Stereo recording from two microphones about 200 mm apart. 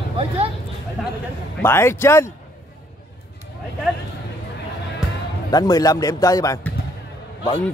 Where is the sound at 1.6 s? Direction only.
10° left (ahead or behind).